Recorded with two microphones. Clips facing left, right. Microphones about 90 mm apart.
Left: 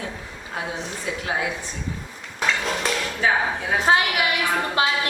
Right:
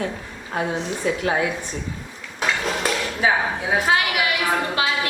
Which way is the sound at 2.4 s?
5° right (ahead or behind).